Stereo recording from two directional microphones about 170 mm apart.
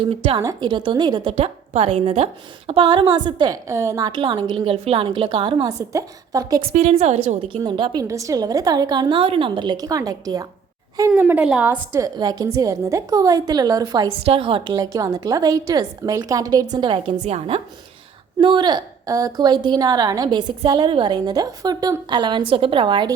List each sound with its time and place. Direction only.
0.0 s a woman's voice: 30° right (ahead or behind)
5.6 s a woman's voice: 20° right (ahead or behind)
6.7 s a woman's voice: 40° right (ahead or behind); by 10.4 s 20° right (ahead or behind)
11.1 s a woman's voice: 10° right (ahead or behind); by 23.1 s 30° right (ahead or behind)